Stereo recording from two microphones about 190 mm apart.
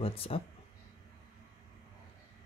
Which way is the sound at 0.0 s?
30° left (ahead or behind).